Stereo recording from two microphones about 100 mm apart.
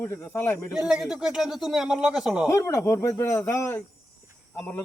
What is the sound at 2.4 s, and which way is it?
Speech, 30° left (ahead or behind).